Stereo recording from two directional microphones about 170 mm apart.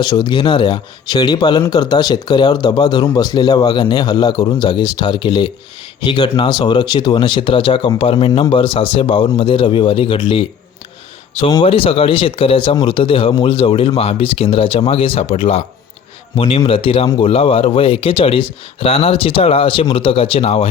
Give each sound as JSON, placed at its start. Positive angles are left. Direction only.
{"t": 0.0, "sound": "speech", "side_deg": 25}
{"t": 11.6, "sound": "speech", "side_deg": 35}